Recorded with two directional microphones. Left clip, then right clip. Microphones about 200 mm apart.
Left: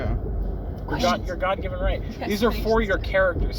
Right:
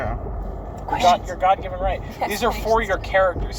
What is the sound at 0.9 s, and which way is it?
Speech, 55° left (ahead or behind).